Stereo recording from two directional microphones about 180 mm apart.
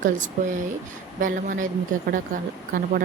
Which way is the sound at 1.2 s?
45° right (ahead or behind).